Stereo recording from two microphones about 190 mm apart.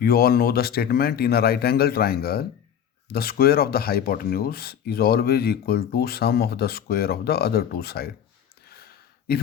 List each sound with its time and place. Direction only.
0.0 s speech: 55° left (ahead or behind)